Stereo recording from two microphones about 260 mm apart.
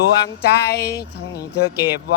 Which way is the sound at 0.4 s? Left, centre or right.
Left.